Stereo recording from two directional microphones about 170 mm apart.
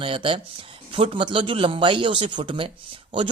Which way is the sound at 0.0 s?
30° right (ahead or behind).